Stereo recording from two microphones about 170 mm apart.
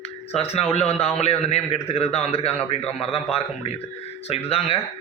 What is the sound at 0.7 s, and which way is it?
A man's voice, 40° left (ahead or behind).